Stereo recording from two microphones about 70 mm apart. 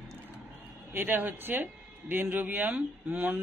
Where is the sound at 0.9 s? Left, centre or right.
Right.